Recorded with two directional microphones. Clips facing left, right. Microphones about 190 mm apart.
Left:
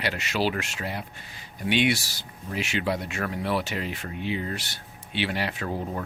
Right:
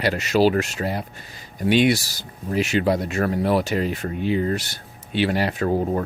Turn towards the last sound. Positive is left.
turn(degrees=-45)  # may be behind; listen again after turning